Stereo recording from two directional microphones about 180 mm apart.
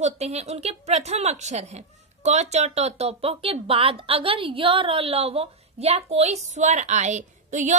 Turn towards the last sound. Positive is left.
turn(degrees=-40)  # may be behind; listen again after turning